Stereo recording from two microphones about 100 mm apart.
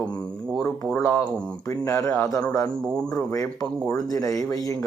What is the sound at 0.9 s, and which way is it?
Speech, 30° left (ahead or behind).